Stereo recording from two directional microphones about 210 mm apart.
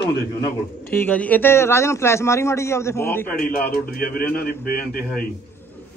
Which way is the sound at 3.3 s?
45° left (ahead or behind).